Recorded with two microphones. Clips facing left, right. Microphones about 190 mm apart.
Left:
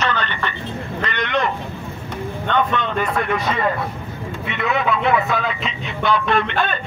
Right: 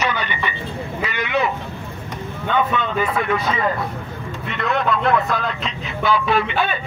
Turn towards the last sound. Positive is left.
turn(degrees=-5)  # may be behind; listen again after turning